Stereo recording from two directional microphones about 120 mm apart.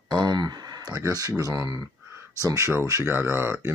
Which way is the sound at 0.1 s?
35° right (ahead or behind).